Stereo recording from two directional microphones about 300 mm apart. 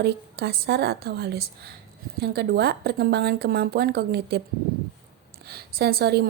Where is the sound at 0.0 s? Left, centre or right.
Right.